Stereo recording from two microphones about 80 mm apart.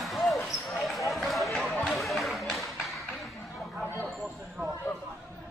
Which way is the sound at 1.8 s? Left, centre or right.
Centre.